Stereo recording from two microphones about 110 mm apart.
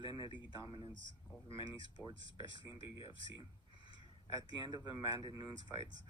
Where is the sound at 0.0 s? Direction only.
45° left (ahead or behind).